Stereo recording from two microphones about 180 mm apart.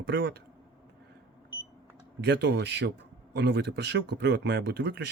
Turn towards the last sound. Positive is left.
turn(degrees=-75)  # may be behind; listen again after turning